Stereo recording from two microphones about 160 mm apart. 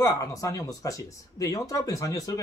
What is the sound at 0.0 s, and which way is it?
Speech, 20° left (ahead or behind).